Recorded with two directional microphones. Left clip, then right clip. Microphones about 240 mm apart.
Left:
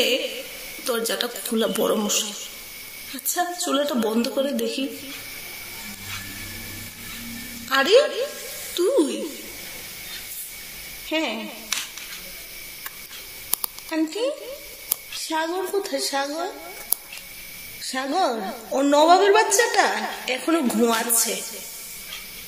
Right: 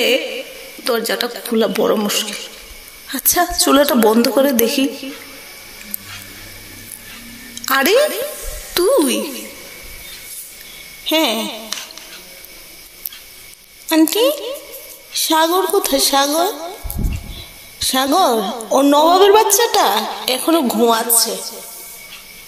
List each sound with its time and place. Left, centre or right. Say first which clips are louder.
0.0 s a woman's voice: right 6 dB; right
3.3 s a woman's voice: right 10 dB; right
7.6 s a woman's voice: right 4 dB; right
11.1 s a woman's voice: right 10 dB; right
13.8 s a woman's voice: right 11 dB; right
17.7 s a woman's voice: right 9 dB; right